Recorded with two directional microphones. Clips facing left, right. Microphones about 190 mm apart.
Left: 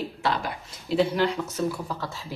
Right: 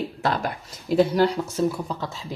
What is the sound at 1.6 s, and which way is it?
Speech, 20° right (ahead or behind).